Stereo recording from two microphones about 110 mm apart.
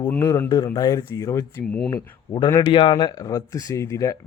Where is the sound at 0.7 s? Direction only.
35° left (ahead or behind).